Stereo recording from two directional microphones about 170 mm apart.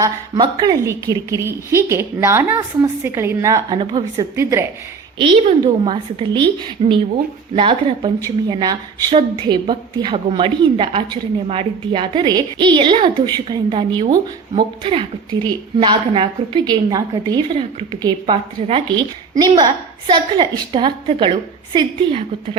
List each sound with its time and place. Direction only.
0.6 s a woman's voice: 20° right (ahead or behind)
5.1 s a woman's voice: 30° right (ahead or behind)